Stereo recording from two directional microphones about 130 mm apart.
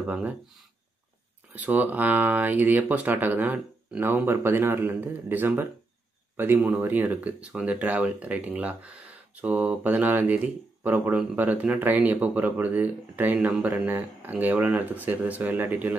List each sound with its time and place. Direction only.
0.0 s speech: 10° right (ahead or behind)
1.5 s speech: 15° right (ahead or behind)